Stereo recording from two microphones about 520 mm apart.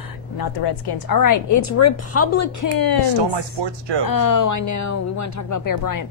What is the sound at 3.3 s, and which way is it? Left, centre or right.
Speech, right.